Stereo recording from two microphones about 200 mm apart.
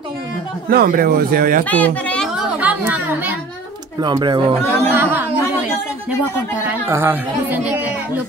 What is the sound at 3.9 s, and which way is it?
Speech, 20° right (ahead or behind).